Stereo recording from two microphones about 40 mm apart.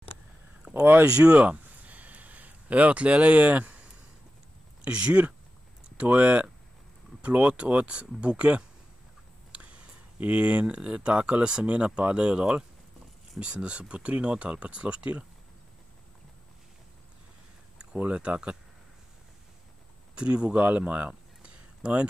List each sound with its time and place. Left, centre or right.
0.6 s a sound: right
4.8 s speech: right
18.1 s speech: right
20.2 s speech: right
20.6 s speech: right
21.1 s a sound: right